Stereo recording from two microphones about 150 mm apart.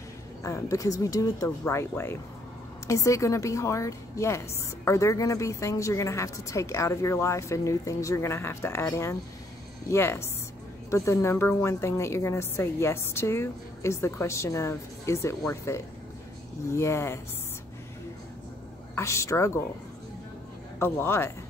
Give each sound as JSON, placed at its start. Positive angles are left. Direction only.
{"t": 0.4, "sound": "a woman's voice", "side_deg": 20}
{"t": 18.9, "sound": "a woman's voice", "side_deg": 20}
{"t": 20.8, "sound": "a woman's voice", "side_deg": 15}